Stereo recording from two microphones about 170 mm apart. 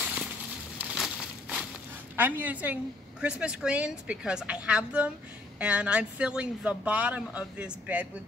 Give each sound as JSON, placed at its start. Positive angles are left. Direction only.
{"t": 0.0, "sound": "a sound", "side_deg": -5}
{"t": 0.7, "sound": "crushing", "side_deg": -5}
{"t": 2.1, "sound": "a woman's voice", "side_deg": -10}